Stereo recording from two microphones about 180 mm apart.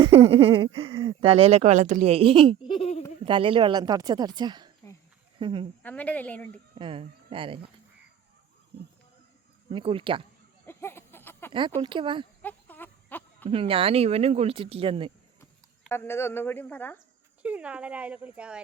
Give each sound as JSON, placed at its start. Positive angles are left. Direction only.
{"t": 0.0, "sound": "speech", "side_deg": -30}
{"t": 2.6, "sound": "a sound", "side_deg": 30}
{"t": 3.2, "sound": "a woman's voice", "side_deg": -30}
{"t": 5.8, "sound": "speech", "side_deg": 10}
{"t": 6.7, "sound": "speech", "side_deg": -30}
{"t": 9.6, "sound": "a woman's voice", "side_deg": -30}
{"t": 10.7, "sound": "a sound", "side_deg": 15}
{"t": 11.8, "sound": "a woman's voice", "side_deg": -25}
{"t": 12.4, "sound": "a sound", "side_deg": 10}
{"t": 13.5, "sound": "speech", "side_deg": -30}
{"t": 15.9, "sound": "speech", "side_deg": 15}
{"t": 17.4, "sound": "speech", "side_deg": -5}